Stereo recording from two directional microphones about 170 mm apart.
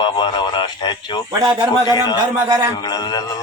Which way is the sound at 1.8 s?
25° left (ahead or behind).